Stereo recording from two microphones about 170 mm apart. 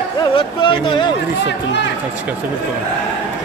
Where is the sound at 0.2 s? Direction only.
30° left (ahead or behind).